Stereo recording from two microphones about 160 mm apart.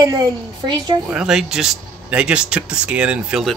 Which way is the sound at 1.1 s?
5° right (ahead or behind).